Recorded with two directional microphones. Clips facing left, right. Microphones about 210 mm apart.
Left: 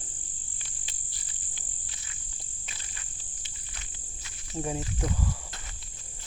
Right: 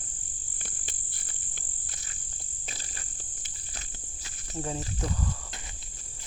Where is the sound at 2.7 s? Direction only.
35° right (ahead or behind).